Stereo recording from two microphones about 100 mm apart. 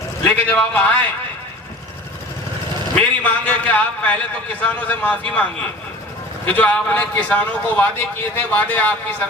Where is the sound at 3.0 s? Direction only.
15° left (ahead or behind).